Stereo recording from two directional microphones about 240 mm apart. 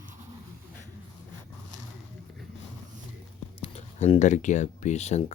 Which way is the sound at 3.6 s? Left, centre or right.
Left.